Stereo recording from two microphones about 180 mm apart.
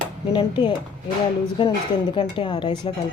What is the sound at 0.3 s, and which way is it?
A woman's voice, 25° left (ahead or behind).